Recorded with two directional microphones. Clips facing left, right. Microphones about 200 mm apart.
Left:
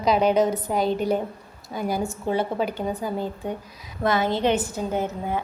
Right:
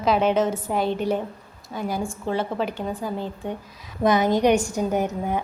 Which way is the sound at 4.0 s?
15° right (ahead or behind).